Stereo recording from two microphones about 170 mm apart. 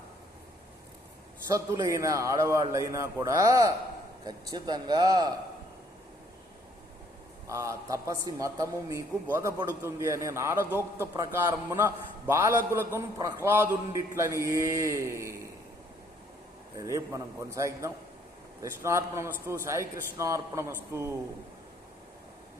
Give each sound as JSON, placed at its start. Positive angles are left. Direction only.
{"t": 1.5, "sound": "a man's voice", "side_deg": -20}
{"t": 7.4, "sound": "a man's voice", "side_deg": -20}
{"t": 16.7, "sound": "a man's voice", "side_deg": -20}